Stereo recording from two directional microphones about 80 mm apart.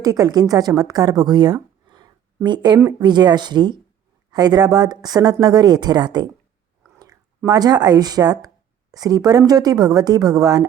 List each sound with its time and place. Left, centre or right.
0.0 s speech: right
1.9 s a sound: right
3.0 s speech: right